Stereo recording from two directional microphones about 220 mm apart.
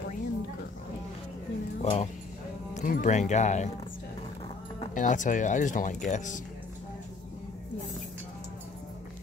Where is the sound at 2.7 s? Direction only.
35° left (ahead or behind).